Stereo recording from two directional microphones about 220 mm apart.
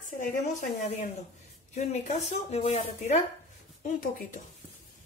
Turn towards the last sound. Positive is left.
turn(degrees=40)  # may be behind; listen again after turning